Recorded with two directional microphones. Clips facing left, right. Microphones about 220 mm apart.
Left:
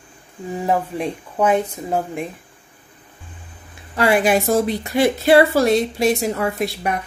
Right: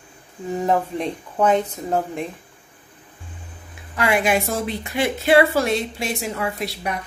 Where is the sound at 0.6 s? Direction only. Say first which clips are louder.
Even; 10° left (ahead or behind).